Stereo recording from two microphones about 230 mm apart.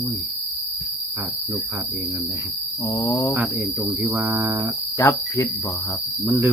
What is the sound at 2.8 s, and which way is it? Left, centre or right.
Cricket, centre.